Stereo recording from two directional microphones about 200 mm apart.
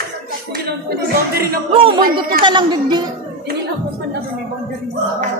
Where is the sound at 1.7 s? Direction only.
25° right (ahead or behind).